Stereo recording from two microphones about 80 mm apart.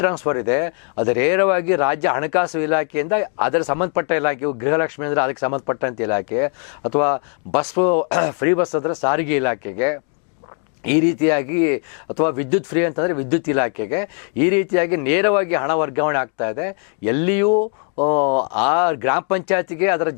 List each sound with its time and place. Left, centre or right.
0.0 s speech: centre